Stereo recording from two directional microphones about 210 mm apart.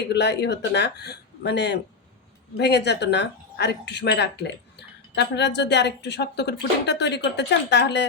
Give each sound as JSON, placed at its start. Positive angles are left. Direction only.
{"t": 0.1, "sound": "speech", "side_deg": 55}